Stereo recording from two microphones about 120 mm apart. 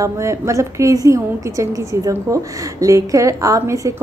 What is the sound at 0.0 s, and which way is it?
A woman's voice, 25° right (ahead or behind).